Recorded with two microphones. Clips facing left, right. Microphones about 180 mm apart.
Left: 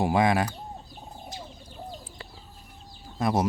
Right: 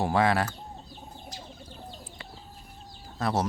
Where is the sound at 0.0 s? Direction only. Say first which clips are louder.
Left 2 dB; 15° left (ahead or behind).